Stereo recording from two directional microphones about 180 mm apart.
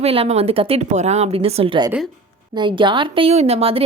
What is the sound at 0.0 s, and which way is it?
Speech, 35° right (ahead or behind).